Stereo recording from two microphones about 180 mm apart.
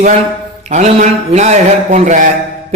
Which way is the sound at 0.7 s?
40° right (ahead or behind).